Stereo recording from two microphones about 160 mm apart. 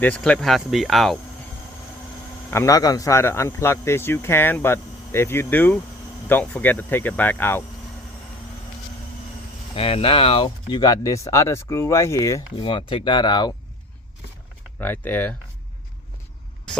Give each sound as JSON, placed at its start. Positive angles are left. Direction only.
{"t": 0.0, "sound": "speech", "side_deg": 5}
{"t": 2.5, "sound": "speech", "side_deg": 20}
{"t": 9.7, "sound": "speech", "side_deg": 35}
{"t": 12.5, "sound": "speech", "side_deg": 30}
{"t": 14.8, "sound": "speech", "side_deg": 10}